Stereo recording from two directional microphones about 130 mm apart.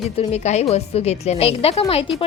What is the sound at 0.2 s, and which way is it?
A woman's voice, 60° left (ahead or behind).